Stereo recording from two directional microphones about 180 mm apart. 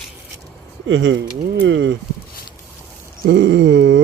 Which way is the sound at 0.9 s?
90° right.